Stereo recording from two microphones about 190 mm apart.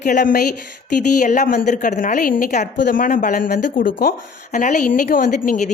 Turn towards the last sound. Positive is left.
turn(degrees=40)  # may be behind; listen again after turning